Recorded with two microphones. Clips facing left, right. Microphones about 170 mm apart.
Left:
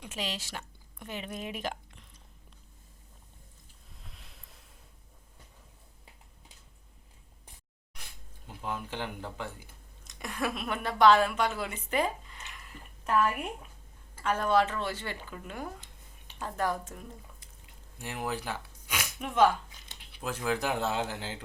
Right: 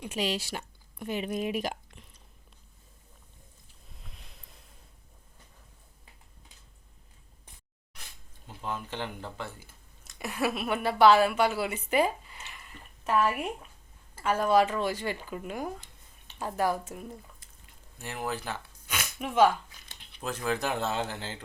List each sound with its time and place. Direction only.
0.0 s speech: 10° right (ahead or behind)
4.1 s a sound: centre (ahead or behind)
8.4 s speech: 10° left (ahead or behind)
10.2 s a woman's voice: 5° right (ahead or behind)
17.9 s a sound: 15° left (ahead or behind)
19.2 s speech: 5° right (ahead or behind)
20.0 s speech: 10° left (ahead or behind)